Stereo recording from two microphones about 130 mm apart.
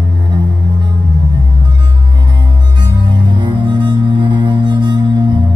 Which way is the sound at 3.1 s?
35° right (ahead or behind).